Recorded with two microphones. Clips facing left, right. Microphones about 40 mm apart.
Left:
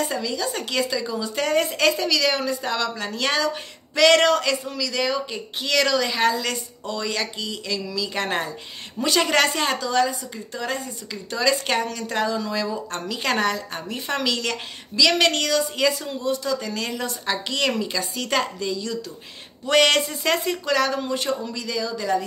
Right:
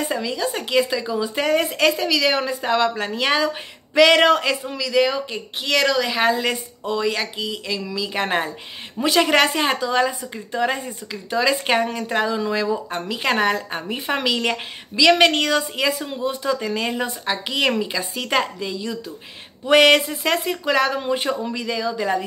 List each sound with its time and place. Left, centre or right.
0.0 s a woman's voice: centre
11.1 s a woman's voice: centre
20.6 s a woman's voice: centre